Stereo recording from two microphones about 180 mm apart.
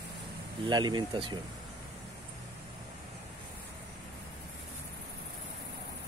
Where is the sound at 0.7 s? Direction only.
25° right (ahead or behind).